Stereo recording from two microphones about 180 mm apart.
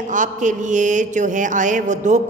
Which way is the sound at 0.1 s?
45° right (ahead or behind).